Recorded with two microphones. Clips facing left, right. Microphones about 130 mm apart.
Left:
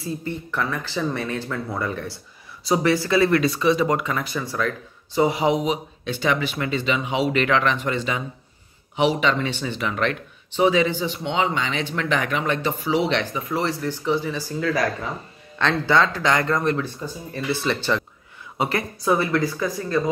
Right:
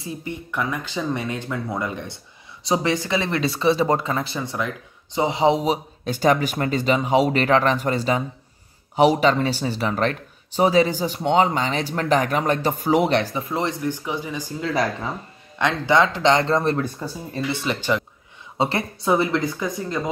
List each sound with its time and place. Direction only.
0.0 s speech: 15° right (ahead or behind); by 13.5 s 35° right (ahead or behind)
13.5 s speech: 20° right (ahead or behind)
16.7 s speech: 40° right (ahead or behind)
17.6 s speech: 15° right (ahead or behind)
18.6 s speech: 25° right (ahead or behind)